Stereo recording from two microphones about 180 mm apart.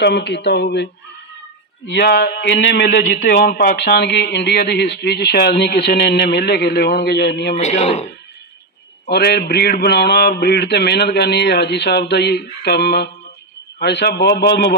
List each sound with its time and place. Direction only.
0.0 s speech: 70° left (ahead or behind)
1.9 s a man's voice: 65° left (ahead or behind)
7.6 s speech: 40° left (ahead or behind)
9.0 s a man's voice: 60° left (ahead or behind)